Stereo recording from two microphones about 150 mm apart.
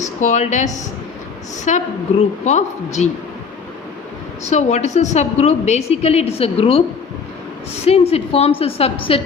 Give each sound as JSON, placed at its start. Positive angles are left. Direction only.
{"t": 0.0, "sound": "a woman's voice", "side_deg": 55}
{"t": 4.4, "sound": "a woman's voice", "side_deg": 50}
{"t": 7.9, "sound": "a woman's voice", "side_deg": 40}